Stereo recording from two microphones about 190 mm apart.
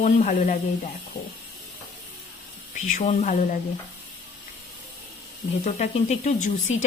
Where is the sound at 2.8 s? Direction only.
40° left (ahead or behind).